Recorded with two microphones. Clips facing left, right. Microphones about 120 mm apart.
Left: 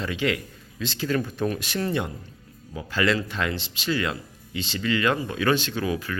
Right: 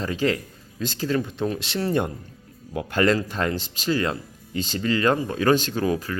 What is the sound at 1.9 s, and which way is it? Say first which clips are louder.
Speech: right 4 dB; 45° right (ahead or behind).